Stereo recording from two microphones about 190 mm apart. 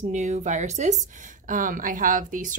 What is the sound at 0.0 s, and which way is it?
Speech, 40° right (ahead or behind).